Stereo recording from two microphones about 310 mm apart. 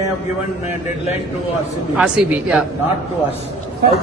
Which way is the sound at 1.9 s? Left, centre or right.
Centre.